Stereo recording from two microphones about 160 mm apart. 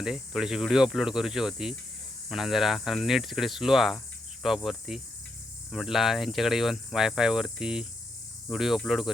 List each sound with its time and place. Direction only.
0.0 s cricket: 5° right (ahead or behind)